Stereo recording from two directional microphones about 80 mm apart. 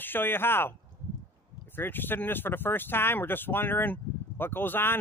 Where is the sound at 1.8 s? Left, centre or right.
Left.